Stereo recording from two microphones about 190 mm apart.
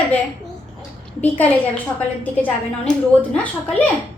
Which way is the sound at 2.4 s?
10° left (ahead or behind).